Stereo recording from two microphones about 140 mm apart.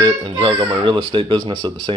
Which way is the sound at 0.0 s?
35° right (ahead or behind).